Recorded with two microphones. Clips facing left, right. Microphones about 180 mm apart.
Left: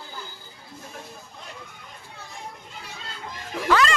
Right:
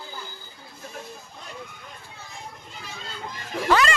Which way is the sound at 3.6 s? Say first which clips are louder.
Even; 15° right (ahead or behind).